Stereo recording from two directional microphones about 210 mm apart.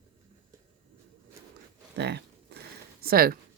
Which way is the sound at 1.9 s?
55° right (ahead or behind).